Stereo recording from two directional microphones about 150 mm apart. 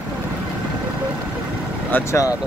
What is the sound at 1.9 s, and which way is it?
Speech, 20° left (ahead or behind).